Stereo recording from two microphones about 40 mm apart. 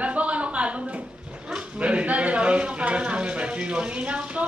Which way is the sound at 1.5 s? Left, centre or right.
Right.